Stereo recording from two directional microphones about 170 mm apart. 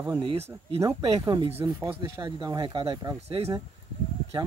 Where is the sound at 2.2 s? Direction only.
25° right (ahead or behind).